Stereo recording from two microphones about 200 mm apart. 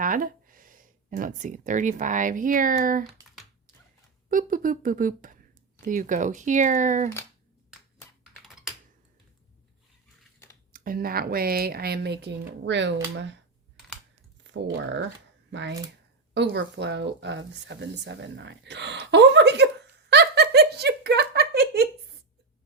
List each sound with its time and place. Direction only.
0.0 s speech: 45° right (ahead or behind)
4.3 s speech: 40° right (ahead or behind)
10.7 s speech: 45° right (ahead or behind); by 13.4 s 65° right (ahead or behind)
14.4 s speech: 65° right (ahead or behind)
20.1 s giggle: 60° right (ahead or behind)